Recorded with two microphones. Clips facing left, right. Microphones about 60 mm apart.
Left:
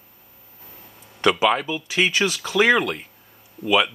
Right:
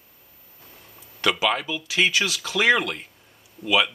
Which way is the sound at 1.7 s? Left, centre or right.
Left.